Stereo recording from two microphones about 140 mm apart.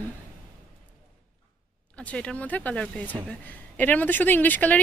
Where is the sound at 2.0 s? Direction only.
10° left (ahead or behind).